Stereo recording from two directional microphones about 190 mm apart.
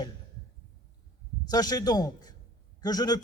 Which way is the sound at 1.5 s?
20° left (ahead or behind).